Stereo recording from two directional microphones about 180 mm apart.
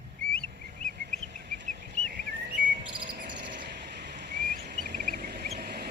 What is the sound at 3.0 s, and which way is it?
Cricket, 65° right (ahead or behind).